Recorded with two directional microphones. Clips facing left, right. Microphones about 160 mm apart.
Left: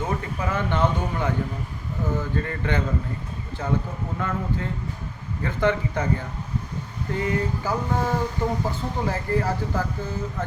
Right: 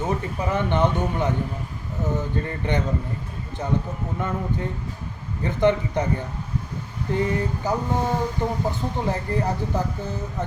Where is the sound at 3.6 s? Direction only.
20° right (ahead or behind).